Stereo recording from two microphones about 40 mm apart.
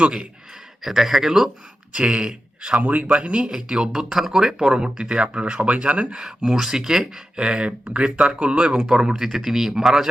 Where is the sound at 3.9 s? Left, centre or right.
Centre; by 6.0 s right.